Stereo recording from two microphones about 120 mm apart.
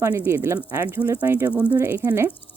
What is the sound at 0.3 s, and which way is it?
Speech, 25° right (ahead or behind).